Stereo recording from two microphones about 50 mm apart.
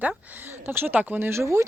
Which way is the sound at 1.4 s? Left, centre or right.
Right.